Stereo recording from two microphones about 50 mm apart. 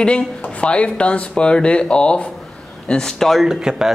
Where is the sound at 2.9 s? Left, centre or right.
Centre.